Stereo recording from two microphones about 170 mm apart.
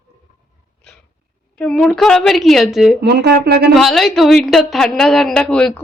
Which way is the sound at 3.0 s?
75° right (ahead or behind).